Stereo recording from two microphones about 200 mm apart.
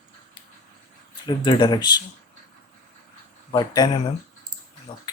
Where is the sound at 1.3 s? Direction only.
20° left (ahead or behind).